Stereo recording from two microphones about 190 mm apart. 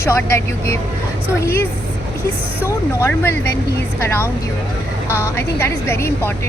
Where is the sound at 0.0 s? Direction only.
15° left (ahead or behind).